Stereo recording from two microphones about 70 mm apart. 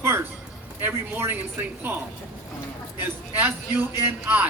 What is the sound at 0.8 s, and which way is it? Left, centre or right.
A man's voice, right.